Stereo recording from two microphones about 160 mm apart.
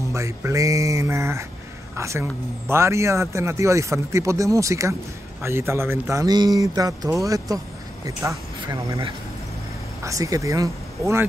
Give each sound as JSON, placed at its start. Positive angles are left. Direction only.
{"t": 0.1, "sound": "a man's voice", "side_deg": -20}
{"t": 10.0, "sound": "a man's voice", "side_deg": -20}